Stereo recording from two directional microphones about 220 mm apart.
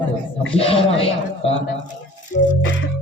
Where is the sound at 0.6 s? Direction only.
25° left (ahead or behind).